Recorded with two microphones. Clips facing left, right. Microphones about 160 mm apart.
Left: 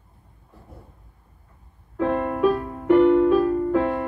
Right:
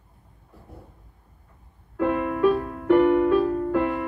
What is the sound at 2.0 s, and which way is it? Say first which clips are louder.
Music: even; centre (ahead or behind).